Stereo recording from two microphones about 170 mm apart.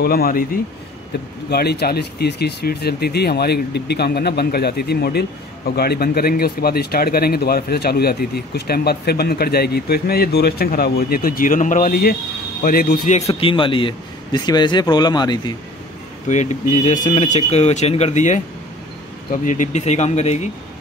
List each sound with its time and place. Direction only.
0.0 s a man's voice: 60° left (ahead or behind)
1.5 s a man's voice: 70° left (ahead or behind); by 13.2 s 55° left (ahead or behind)
13.3 s speech: 30° left (ahead or behind)
16.3 s speech: 45° left (ahead or behind)